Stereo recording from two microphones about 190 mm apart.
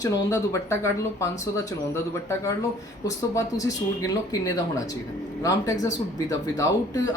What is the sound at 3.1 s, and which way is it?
Speech, 15° left (ahead or behind).